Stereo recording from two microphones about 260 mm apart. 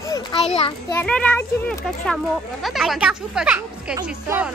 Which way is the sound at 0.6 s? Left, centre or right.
Centre.